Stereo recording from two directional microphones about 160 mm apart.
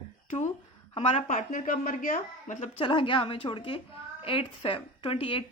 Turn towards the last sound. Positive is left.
turn(degrees=35)  # may be behind; listen again after turning